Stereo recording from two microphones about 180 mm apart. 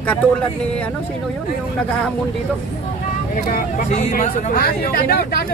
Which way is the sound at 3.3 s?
50° left (ahead or behind).